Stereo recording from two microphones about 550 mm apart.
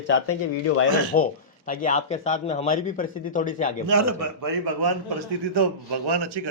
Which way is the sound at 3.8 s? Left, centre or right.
Right.